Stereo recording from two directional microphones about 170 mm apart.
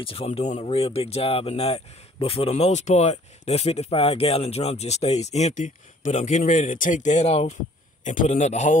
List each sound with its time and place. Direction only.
0.0 s a man's voice: 35° left (ahead or behind)